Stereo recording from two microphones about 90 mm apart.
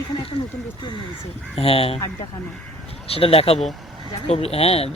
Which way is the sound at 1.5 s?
90° left.